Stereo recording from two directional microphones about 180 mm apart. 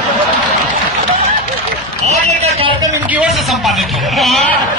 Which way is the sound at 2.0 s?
35° right (ahead or behind).